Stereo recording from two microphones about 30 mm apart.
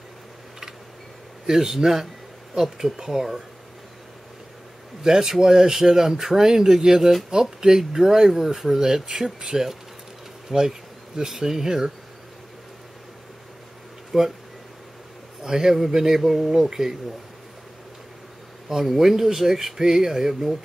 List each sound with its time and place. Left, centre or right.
1.4 s speech: centre
5.0 s speech: right
14.1 s speech: centre
15.4 s speech: centre
18.7 s speech: centre